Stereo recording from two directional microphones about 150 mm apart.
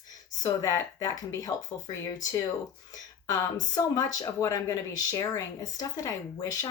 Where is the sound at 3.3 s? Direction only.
25° left (ahead or behind).